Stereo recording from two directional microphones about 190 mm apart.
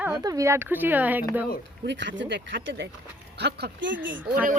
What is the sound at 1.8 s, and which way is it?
Speech, 70° right (ahead or behind).